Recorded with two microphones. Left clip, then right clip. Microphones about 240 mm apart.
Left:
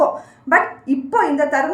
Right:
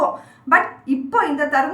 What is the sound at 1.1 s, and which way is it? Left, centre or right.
Speech, centre.